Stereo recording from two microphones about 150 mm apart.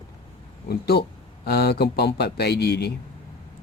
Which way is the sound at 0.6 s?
90° left.